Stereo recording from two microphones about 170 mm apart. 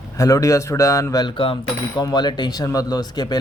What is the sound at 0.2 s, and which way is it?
A man's voice, 20° left (ahead or behind).